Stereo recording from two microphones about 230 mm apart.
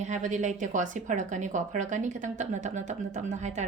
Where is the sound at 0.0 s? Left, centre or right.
Right.